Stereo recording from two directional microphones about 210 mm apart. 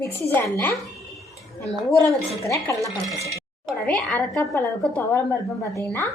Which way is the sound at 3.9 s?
5° left (ahead or behind).